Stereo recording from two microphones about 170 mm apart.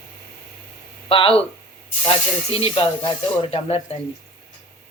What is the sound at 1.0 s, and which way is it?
Speech, 30° left (ahead or behind).